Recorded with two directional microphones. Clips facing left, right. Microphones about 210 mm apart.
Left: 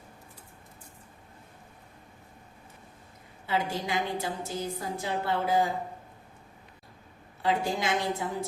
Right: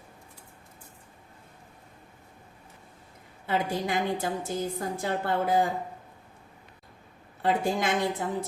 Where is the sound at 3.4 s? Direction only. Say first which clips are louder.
Right 2 dB; 50° right (ahead or behind).